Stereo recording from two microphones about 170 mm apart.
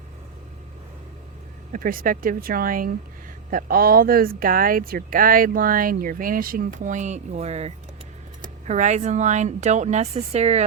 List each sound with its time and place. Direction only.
1.7 s a woman's voice: 55° right (ahead or behind); by 10.6 s 40° right (ahead or behind)